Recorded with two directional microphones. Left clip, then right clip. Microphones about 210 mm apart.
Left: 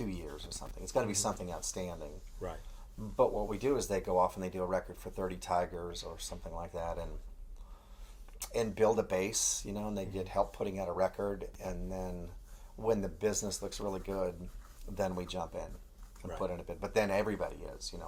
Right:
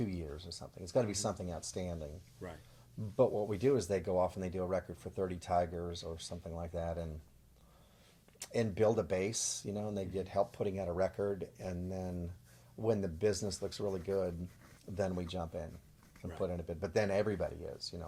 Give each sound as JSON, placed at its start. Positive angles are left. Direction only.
{"t": 0.0, "sound": "speech", "side_deg": -50}
{"t": 3.2, "sound": "speech", "side_deg": -50}
{"t": 8.4, "sound": "speech", "side_deg": -50}